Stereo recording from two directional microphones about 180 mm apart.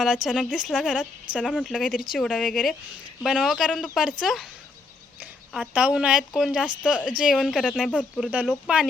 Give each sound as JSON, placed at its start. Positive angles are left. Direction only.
{"t": 0.0, "sound": "a woman's voice", "side_deg": 0}
{"t": 5.5, "sound": "a woman's voice", "side_deg": -5}